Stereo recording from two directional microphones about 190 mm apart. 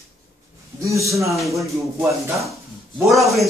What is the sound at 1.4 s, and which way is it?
Speech, centre (ahead or behind).